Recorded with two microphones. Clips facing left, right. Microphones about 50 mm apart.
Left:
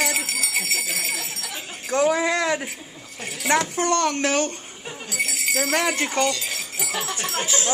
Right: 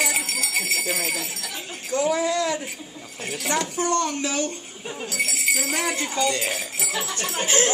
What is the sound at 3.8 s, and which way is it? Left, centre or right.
Speech, left.